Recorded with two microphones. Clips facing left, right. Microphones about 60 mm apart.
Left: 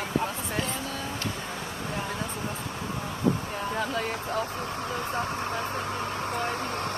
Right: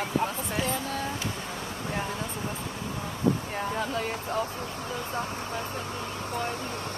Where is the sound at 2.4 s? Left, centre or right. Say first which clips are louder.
Left 1 dB; centre.